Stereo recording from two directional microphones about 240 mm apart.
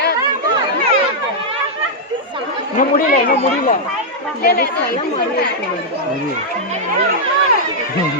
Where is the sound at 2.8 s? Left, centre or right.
Left.